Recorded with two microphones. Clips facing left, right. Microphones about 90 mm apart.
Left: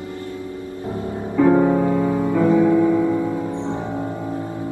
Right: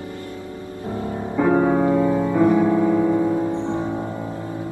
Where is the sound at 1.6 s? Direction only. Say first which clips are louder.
Even; 25° right (ahead or behind).